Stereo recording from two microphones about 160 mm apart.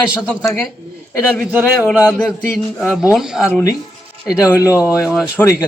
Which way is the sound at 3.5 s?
20° left (ahead or behind).